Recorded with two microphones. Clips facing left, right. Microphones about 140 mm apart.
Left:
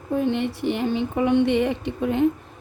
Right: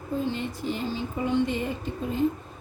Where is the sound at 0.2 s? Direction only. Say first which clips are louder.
Left 8 dB; 65° left (ahead or behind).